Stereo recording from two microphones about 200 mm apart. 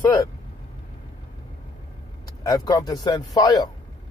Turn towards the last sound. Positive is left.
turn(degrees=20)  # may be behind; listen again after turning